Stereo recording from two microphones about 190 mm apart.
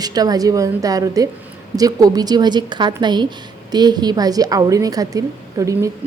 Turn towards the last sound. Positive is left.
turn(degrees=-15)  # may be behind; listen again after turning